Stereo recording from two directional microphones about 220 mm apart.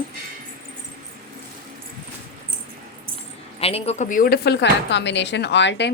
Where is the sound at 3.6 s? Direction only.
25° left (ahead or behind); by 5.9 s 50° left (ahead or behind).